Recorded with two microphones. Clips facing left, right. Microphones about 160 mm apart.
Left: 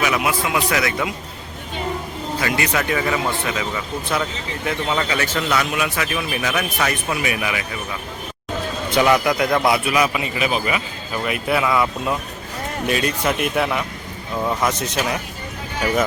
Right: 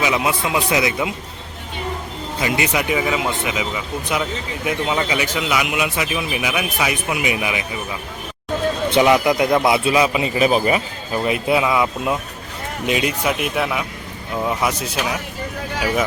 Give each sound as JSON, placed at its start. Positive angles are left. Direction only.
{"t": 0.0, "sound": "a man's voice", "side_deg": -20}
{"t": 2.4, "sound": "speech", "side_deg": -20}
{"t": 8.9, "sound": "a man's voice", "side_deg": -20}
{"t": 10.3, "sound": "a man's voice", "side_deg": -35}
{"t": 11.2, "sound": "a man's voice", "side_deg": -20}
{"t": 13.2, "sound": "speech", "side_deg": 0}